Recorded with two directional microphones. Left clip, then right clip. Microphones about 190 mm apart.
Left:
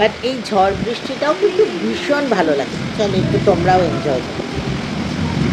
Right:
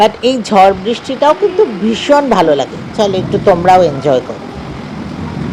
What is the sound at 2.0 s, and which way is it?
Speech, 35° right (ahead or behind).